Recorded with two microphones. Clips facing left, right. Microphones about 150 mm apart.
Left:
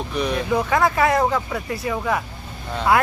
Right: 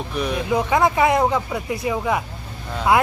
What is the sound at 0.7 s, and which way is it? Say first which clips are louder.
Speech: right 2 dB; 20° right (ahead or behind).